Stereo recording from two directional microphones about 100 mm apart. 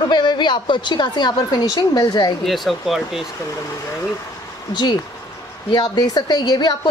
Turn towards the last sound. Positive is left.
turn(degrees=45)  # may be behind; listen again after turning